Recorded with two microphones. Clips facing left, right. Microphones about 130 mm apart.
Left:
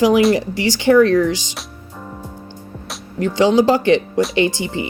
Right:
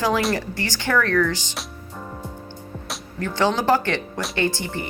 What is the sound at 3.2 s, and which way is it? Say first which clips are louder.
Speech: left 8 dB; 15° left (ahead or behind).